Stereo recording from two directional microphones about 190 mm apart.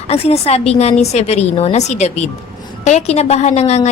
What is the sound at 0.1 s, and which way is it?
A woman's voice, 35° left (ahead or behind).